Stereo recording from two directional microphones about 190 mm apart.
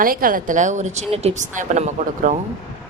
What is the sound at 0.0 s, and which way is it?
A woman's voice, 50° right (ahead or behind).